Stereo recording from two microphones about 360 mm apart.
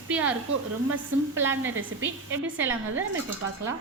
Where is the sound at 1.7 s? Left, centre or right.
Right.